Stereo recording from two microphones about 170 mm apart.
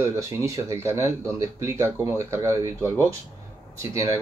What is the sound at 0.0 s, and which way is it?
A man's voice, 15° right (ahead or behind).